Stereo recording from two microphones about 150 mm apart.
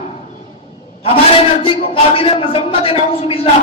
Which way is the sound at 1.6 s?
40° left (ahead or behind).